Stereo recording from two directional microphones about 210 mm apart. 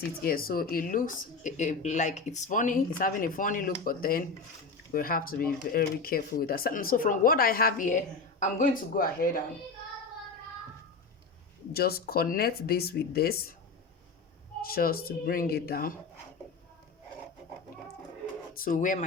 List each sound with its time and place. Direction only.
0.2 s speech: 45° left (ahead or behind)
11.7 s speech: 45° left (ahead or behind)
14.6 s speech: 45° left (ahead or behind)
18.5 s speech: 40° left (ahead or behind)